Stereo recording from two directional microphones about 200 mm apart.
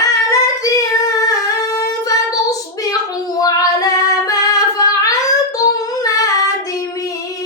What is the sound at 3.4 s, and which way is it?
Child singing, 20° left (ahead or behind).